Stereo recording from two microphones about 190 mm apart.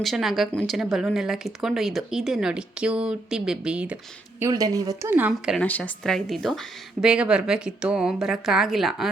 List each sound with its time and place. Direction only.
0.0 s speech: centre (ahead or behind)
4.4 s speech: 15° right (ahead or behind)
5.5 s speech: 10° left (ahead or behind)